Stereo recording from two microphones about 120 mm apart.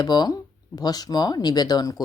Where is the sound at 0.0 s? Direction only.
35° left (ahead or behind).